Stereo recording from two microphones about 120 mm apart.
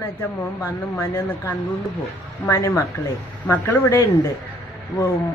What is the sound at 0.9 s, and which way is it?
A man's voice, 20° left (ahead or behind).